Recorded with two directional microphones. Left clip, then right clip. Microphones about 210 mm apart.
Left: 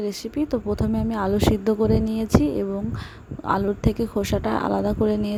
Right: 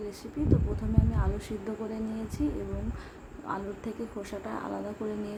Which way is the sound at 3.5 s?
40° left (ahead or behind).